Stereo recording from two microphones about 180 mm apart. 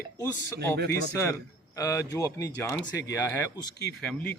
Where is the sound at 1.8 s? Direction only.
20° left (ahead or behind).